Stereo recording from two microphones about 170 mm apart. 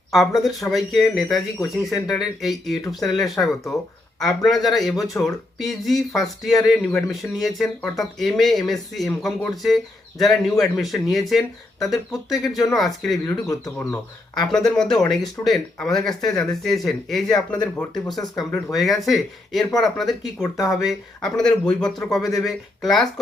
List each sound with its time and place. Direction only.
0.1 s speech: centre (ahead or behind)
13.5 s speech: 15° left (ahead or behind)
14.4 s speech: 5° left (ahead or behind)